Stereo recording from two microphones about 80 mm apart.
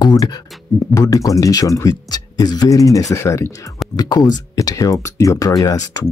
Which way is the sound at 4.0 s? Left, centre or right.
Left.